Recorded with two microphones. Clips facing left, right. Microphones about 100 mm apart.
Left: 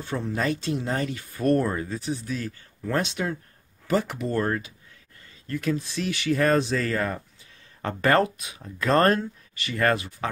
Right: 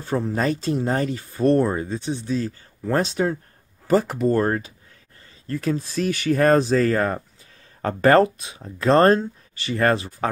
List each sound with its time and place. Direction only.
0.0 s speech: 40° right (ahead or behind)